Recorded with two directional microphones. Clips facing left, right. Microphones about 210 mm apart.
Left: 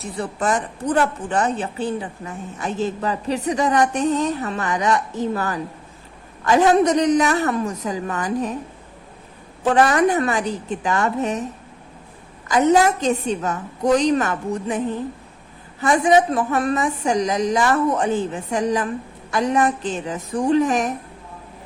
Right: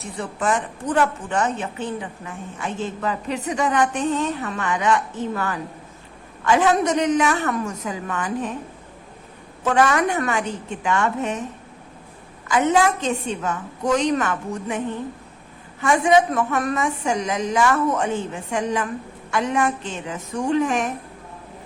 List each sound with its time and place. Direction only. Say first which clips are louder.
0.0 s a woman's voice: left 2 dB; 35° left (ahead or behind)
9.6 s a woman's voice: left 3 dB; 35° left (ahead or behind)
12.5 s a woman's voice: left 3 dB; 35° left (ahead or behind)
15.8 s a woman's voice: left 1 dB; 35° left (ahead or behind)